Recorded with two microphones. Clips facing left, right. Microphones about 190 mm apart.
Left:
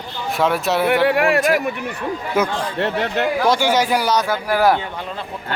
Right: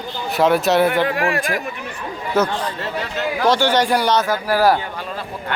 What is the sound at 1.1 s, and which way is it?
Speech, 65° left (ahead or behind).